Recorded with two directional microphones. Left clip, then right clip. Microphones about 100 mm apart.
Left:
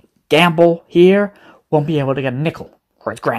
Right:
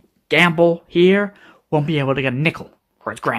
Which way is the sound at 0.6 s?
30° left (ahead or behind).